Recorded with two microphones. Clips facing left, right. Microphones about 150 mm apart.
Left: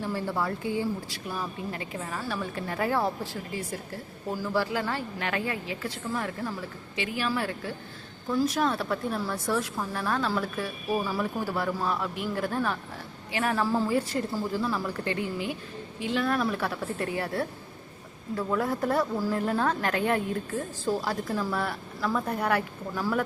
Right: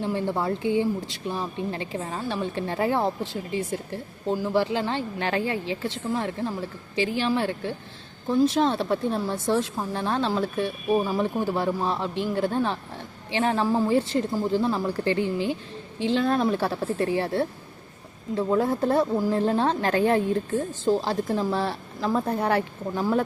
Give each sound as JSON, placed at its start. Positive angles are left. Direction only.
{"t": 0.0, "sound": "a woman's voice", "side_deg": -20}